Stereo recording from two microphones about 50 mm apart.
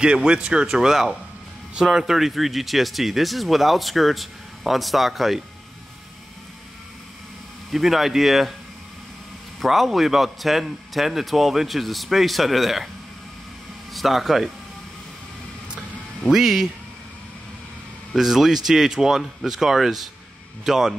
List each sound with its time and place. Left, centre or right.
0.0 s speech: centre
7.7 s speech: centre
9.7 s speech: centre
13.9 s speech: centre
16.3 s speech: centre
18.1 s speech: centre